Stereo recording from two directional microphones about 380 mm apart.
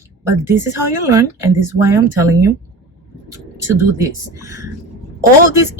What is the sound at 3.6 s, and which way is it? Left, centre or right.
Speech, centre.